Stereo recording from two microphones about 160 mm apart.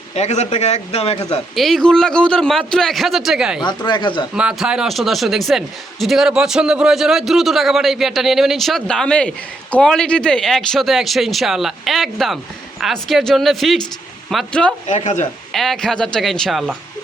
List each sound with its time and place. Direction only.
0.1 s speech: 45° left (ahead or behind)
1.5 s a man's voice: centre (ahead or behind)
3.6 s speech: 25° left (ahead or behind)
4.4 s a man's voice: 5° right (ahead or behind)
14.8 s speech: 45° left (ahead or behind)
15.5 s a man's voice: centre (ahead or behind)